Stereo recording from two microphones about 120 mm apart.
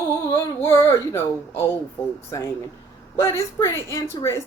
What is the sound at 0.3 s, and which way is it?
Speech, 25° left (ahead or behind).